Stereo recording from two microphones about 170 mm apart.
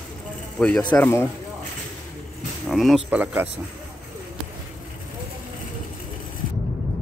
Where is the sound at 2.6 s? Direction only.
Centre (ahead or behind).